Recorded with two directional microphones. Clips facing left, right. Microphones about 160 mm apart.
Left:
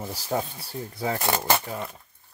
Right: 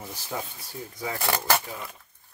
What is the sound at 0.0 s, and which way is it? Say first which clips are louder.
Rub: left 6 dB; 35° left (ahead or behind).